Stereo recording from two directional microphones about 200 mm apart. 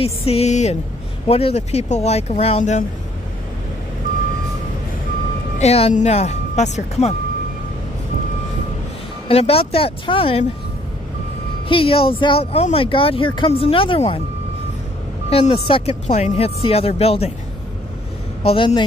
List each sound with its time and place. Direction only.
0.0 s speech: 30° left (ahead or behind)
5.6 s speech: 30° left (ahead or behind)
9.3 s speech: 30° left (ahead or behind)
11.7 s speech: 25° left (ahead or behind)
15.2 s speech: 30° left (ahead or behind)
18.4 s speech: 30° left (ahead or behind)